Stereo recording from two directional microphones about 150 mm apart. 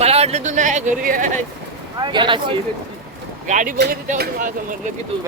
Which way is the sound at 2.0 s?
30° right (ahead or behind).